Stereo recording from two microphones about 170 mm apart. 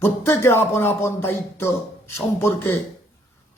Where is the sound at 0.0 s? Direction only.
15° left (ahead or behind).